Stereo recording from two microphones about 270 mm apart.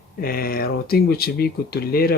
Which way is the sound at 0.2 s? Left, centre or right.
Left.